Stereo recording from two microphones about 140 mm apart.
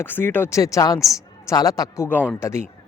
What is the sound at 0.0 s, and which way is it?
Speech, 15° left (ahead or behind).